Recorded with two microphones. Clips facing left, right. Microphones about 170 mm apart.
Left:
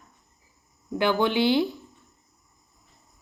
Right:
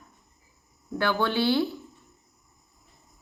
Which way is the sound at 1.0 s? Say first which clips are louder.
Left 3 dB; 15° left (ahead or behind).